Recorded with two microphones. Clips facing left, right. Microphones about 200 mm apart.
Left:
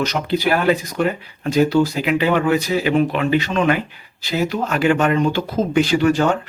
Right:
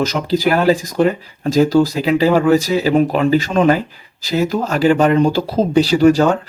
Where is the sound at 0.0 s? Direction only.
40° right (ahead or behind).